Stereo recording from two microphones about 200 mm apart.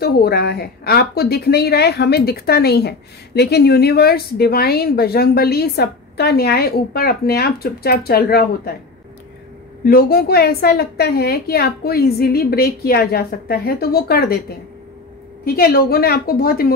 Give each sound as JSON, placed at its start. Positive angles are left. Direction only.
{"t": 0.0, "sound": "a woman's voice", "side_deg": 50}
{"t": 9.8, "sound": "a woman's voice", "side_deg": 50}
{"t": 15.4, "sound": "a woman's voice", "side_deg": 50}